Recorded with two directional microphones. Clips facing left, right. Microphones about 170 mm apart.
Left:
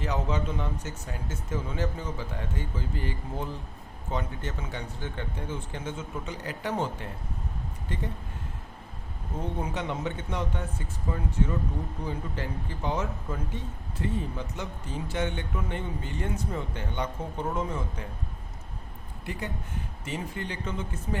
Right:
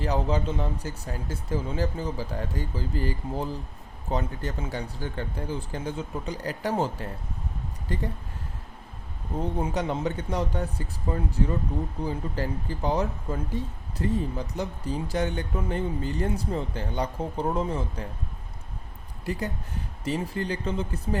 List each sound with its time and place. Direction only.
0.0 s speech: 35° right (ahead or behind)
9.4 s speech: 30° right (ahead or behind)
19.2 s speech: 40° right (ahead or behind)